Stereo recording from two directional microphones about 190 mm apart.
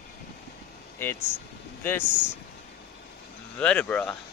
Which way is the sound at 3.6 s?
5° left (ahead or behind).